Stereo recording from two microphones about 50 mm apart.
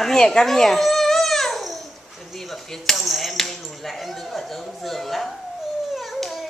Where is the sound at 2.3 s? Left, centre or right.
Centre.